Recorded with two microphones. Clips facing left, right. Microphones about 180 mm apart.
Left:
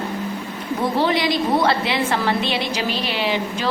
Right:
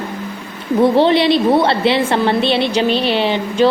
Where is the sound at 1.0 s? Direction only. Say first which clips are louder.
Right 7 dB; 30° right (ahead or behind).